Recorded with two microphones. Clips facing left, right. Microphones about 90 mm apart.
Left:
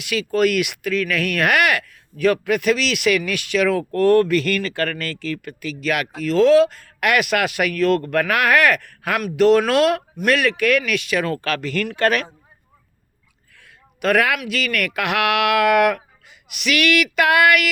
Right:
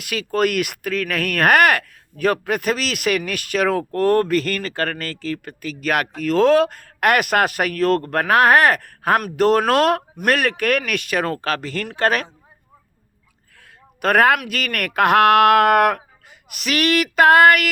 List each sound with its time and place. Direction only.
0.0 s speech: 45° right (ahead or behind)
13.6 s speech: 45° right (ahead or behind)